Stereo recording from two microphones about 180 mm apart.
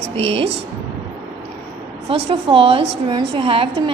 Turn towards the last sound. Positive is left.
turn(degrees=-30)  # may be behind; listen again after turning